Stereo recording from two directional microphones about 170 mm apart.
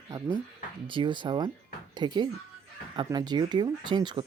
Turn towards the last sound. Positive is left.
turn(degrees=-25)  # may be behind; listen again after turning